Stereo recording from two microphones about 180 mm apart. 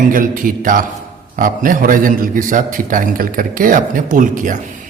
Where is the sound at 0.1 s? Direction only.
50° right (ahead or behind).